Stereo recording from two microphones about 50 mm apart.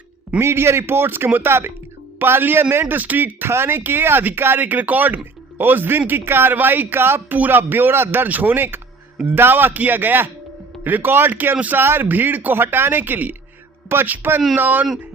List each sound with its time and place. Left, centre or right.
0.3 s speech: right
7.3 s speech: right
11.8 s speech: right